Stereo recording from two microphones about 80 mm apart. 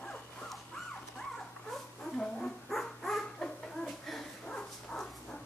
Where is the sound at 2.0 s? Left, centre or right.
Centre.